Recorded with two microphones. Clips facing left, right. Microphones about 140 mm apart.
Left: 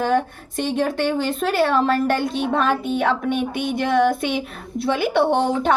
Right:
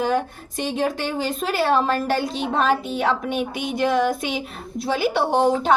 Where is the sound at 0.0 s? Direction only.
55° left (ahead or behind).